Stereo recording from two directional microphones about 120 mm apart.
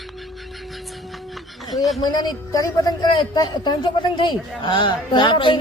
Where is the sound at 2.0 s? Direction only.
35° left (ahead or behind).